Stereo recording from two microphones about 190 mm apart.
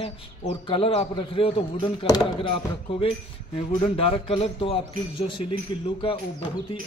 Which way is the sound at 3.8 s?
30° left (ahead or behind).